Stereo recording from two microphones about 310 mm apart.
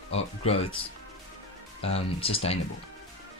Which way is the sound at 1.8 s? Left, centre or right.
Centre.